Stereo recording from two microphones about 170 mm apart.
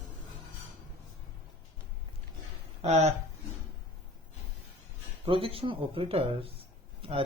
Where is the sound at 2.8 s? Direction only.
40° right (ahead or behind).